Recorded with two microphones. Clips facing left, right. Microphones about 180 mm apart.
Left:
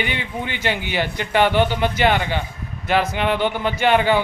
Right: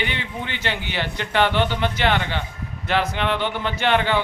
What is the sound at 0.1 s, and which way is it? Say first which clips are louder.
A man's voice: left 3 dB; 10° left (ahead or behind).